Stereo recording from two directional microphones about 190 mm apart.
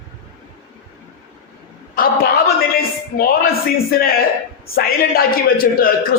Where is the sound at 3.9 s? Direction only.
50° left (ahead or behind).